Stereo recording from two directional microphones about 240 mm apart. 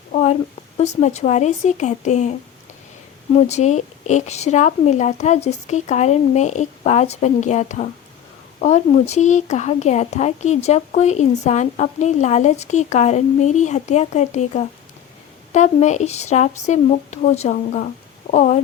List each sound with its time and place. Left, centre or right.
0.1 s a sound: left
0.8 s speech: left
3.3 s speech: left